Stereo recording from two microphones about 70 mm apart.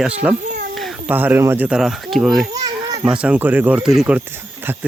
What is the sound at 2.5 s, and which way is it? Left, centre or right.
Children playing, right.